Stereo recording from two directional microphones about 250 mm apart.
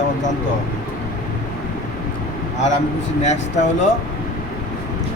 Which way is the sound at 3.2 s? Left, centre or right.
Left.